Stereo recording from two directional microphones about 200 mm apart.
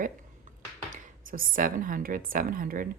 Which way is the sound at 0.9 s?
40° right (ahead or behind).